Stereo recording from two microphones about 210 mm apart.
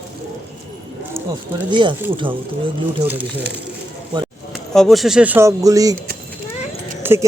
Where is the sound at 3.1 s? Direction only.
10° right (ahead or behind).